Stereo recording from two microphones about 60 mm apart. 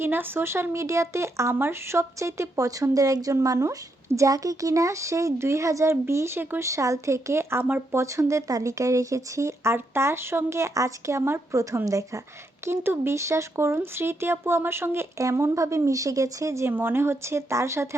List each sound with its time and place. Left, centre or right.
0.0 s a woman's voice: right
3.6 s a woman's voice: right
6.6 s a woman's voice: right
7.9 s a woman's voice: right
12.6 s speech: right
13.1 s speech: right
15.2 s a woman's voice: right
16.7 s speech: right